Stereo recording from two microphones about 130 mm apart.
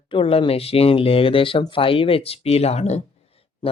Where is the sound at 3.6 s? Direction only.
35° left (ahead or behind).